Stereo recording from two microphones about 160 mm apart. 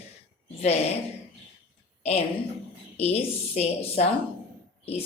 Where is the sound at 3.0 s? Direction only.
40° left (ahead or behind).